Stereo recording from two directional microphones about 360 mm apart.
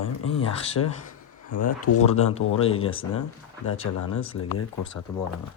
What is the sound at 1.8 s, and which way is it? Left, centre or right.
Speech, left.